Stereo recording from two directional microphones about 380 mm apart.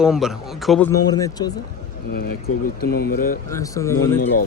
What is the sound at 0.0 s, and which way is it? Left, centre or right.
Speech, centre.